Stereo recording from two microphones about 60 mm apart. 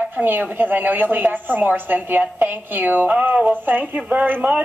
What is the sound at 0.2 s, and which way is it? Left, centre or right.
A woman's voice, right.